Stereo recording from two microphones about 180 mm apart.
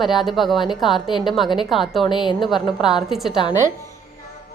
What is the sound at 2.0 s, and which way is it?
Speech, 25° left (ahead or behind).